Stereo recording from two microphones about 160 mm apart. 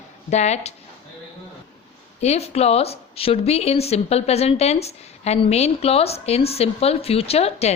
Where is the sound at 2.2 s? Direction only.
40° left (ahead or behind).